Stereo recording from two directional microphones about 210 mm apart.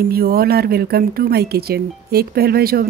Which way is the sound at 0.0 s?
45° right (ahead or behind).